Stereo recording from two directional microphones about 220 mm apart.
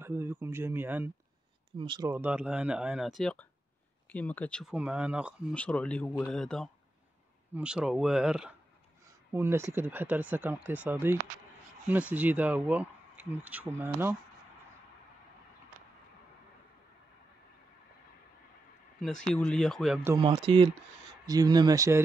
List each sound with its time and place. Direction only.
0.0 s speech: 10° right (ahead or behind)
1.8 s speech: 20° right (ahead or behind)
2.1 s speech: 10° right (ahead or behind)
5.5 s speech: 5° left (ahead or behind)
18.9 s speech: centre (ahead or behind)
20.2 s speech: 20° right (ahead or behind)